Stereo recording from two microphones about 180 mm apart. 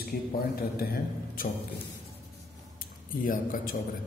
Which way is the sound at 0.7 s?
55° left (ahead or behind).